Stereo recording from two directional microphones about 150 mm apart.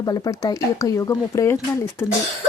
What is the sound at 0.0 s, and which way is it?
Speech, 25° left (ahead or behind).